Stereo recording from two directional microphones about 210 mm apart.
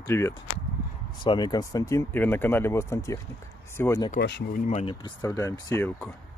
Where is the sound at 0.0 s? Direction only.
15° left (ahead or behind).